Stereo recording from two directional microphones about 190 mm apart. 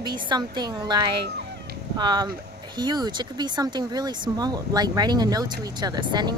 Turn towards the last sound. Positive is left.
turn(degrees=-20)  # may be behind; listen again after turning